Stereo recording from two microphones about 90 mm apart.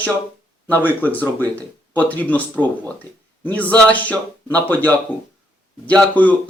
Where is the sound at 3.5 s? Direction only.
20° left (ahead or behind).